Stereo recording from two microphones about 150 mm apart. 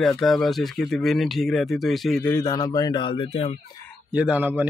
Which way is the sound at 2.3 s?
20° left (ahead or behind).